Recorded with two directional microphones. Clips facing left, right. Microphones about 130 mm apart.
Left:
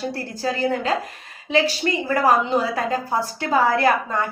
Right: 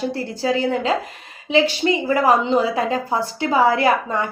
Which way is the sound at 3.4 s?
15° right (ahead or behind).